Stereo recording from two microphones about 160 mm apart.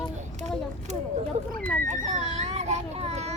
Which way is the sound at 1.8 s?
50° right (ahead or behind).